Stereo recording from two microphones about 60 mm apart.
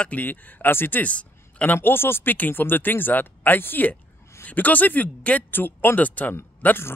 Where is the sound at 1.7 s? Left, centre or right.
Left.